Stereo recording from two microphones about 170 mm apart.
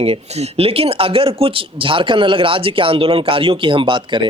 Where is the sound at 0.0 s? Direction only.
35° right (ahead or behind).